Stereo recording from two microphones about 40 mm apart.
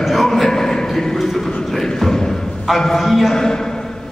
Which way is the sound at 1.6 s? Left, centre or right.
Centre.